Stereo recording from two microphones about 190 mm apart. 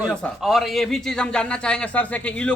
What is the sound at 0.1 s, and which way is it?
A man's voice, 5° left (ahead or behind).